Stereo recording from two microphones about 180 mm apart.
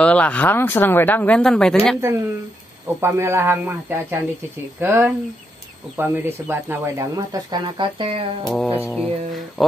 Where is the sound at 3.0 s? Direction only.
15° right (ahead or behind).